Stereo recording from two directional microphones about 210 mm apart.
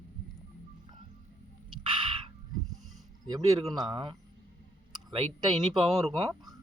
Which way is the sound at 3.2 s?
20° right (ahead or behind).